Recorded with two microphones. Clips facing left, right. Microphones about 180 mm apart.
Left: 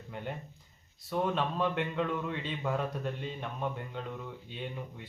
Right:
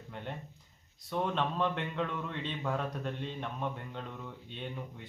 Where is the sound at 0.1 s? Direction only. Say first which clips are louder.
Left 3 dB; 5° left (ahead or behind).